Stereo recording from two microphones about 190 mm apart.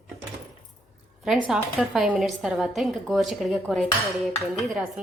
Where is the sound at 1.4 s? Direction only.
5° right (ahead or behind).